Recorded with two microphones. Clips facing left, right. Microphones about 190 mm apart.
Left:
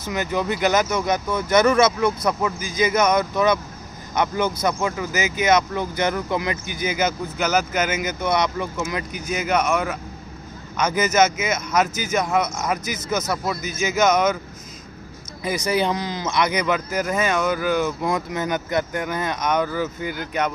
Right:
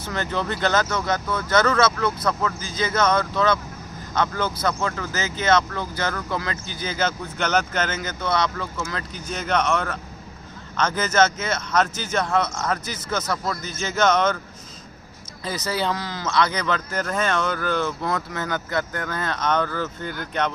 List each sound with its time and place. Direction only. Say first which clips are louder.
0.0 s speech: left 3 dB; 10° left (ahead or behind)
15.4 s speech: left 4 dB; 15° left (ahead or behind)